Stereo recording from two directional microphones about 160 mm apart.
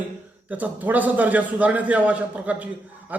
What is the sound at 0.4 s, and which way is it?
A man's voice, 10° right (ahead or behind).